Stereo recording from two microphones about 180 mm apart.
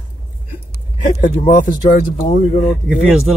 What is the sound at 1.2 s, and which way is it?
Speech, 45° left (ahead or behind).